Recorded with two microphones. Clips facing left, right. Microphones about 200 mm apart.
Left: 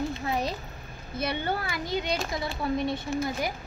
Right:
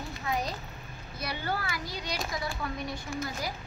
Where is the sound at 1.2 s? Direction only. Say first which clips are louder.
Left 5 dB; 25° left (ahead or behind).